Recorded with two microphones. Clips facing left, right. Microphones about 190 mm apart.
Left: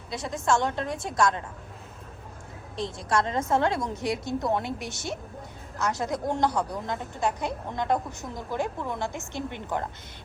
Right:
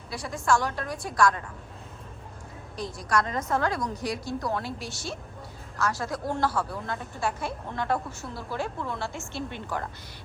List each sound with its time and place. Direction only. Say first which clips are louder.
0.1 s a woman's voice: even; 20° left (ahead or behind)
2.7 s a woman's voice: left 1 dB; 25° left (ahead or behind)